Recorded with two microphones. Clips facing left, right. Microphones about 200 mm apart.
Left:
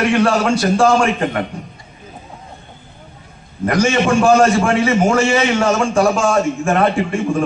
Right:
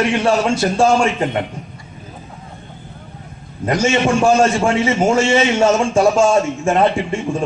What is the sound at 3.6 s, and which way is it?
A man's voice, 20° right (ahead or behind).